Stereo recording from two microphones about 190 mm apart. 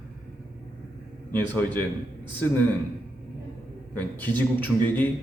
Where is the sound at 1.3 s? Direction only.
10° left (ahead or behind).